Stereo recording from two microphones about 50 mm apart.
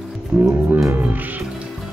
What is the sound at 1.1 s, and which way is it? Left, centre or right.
Music, right.